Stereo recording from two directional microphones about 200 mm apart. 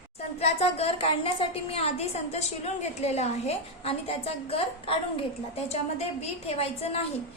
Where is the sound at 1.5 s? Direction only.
30° left (ahead or behind).